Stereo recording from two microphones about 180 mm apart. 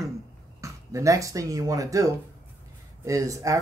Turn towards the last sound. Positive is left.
turn(degrees=-20)  # may be behind; listen again after turning